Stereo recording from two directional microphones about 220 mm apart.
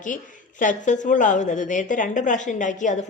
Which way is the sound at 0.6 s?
35° left (ahead or behind).